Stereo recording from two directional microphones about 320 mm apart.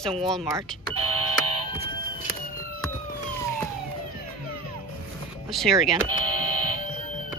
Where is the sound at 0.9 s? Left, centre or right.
Right.